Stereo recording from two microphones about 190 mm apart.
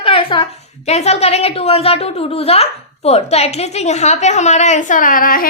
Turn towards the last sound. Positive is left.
turn(degrees=50)  # may be behind; listen again after turning